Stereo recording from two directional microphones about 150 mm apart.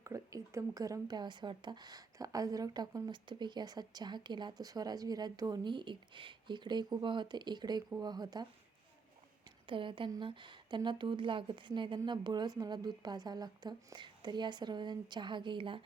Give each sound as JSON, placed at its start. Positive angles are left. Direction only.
{"t": 0.0, "sound": "speech", "side_deg": -20}
{"t": 9.6, "sound": "a woman's voice", "side_deg": -35}